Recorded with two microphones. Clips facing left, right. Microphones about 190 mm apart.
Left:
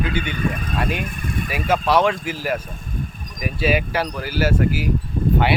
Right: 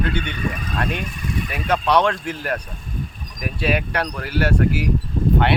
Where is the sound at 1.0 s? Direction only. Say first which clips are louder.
Even; 50° left (ahead or behind).